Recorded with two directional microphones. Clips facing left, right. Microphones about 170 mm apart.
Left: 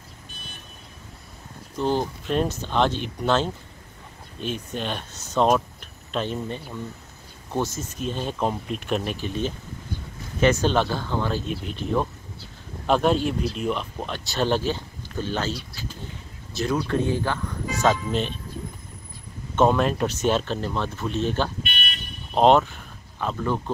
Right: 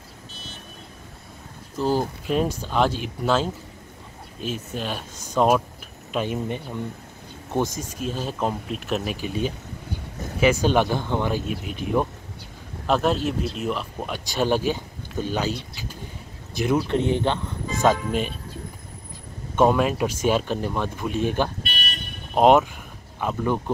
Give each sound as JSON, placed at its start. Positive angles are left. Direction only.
{"t": 1.8, "sound": "speech", "side_deg": -5}
{"t": 12.8, "sound": "speech", "side_deg": 0}
{"t": 17.8, "sound": "speech", "side_deg": -10}
{"t": 19.5, "sound": "speech", "side_deg": -10}
{"t": 21.6, "sound": "vehicle", "side_deg": -35}
{"t": 22.3, "sound": "speech", "side_deg": -10}